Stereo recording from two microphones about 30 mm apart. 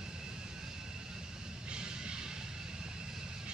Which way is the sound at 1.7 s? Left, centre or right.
Right.